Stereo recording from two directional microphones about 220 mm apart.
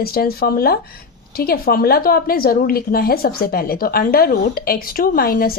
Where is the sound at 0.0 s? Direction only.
45° left (ahead or behind).